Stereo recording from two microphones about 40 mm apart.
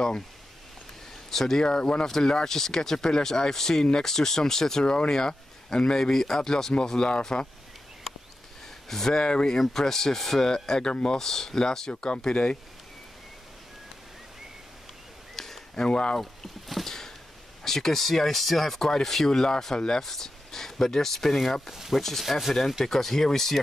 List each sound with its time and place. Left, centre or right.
1.3 s speech: centre
8.8 s speech: centre
9.2 s speech: left
9.6 s speech: centre
15.3 s a sound: centre
15.7 s speech: left
16.2 s boat: centre
17.6 s speech: centre
21.6 s speech: centre